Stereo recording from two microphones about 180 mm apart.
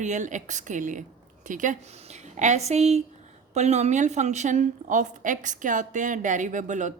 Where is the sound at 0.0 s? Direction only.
45° right (ahead or behind).